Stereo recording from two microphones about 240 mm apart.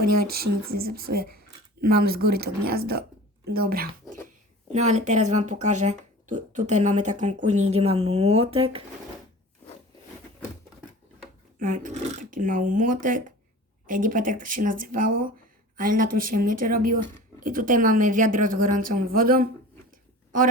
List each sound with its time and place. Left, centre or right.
0.7 s speech: right
11.6 s speech: right